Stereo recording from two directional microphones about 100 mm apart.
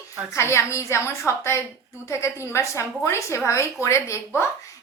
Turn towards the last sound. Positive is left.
turn(degrees=30)  # may be behind; listen again after turning